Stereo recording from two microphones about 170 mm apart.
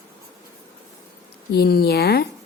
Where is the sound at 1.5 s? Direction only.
65° left (ahead or behind).